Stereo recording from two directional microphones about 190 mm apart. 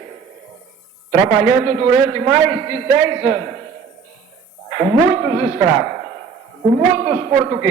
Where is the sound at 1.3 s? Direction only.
20° right (ahead or behind).